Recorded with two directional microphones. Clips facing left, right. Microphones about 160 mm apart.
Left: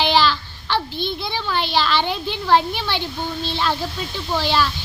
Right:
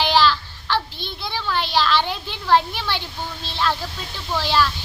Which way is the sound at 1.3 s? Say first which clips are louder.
Right 2 dB; centre (ahead or behind).